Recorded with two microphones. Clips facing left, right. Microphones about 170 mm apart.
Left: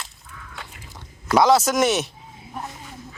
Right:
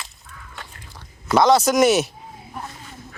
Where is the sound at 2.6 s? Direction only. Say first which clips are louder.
Left 2 dB; 20° left (ahead or behind).